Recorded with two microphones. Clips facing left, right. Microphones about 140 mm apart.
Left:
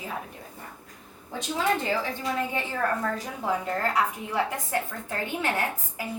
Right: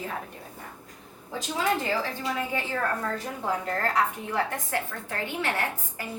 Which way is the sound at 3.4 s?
Centre (ahead or behind).